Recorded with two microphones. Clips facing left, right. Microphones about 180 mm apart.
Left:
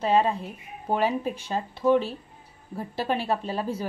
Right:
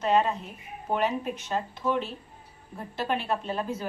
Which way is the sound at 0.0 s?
30° left (ahead or behind).